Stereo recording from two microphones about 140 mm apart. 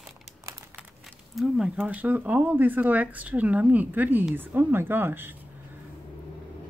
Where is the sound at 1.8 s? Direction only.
10° right (ahead or behind).